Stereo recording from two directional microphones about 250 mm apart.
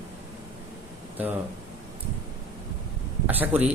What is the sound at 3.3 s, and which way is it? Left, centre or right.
Speech, centre.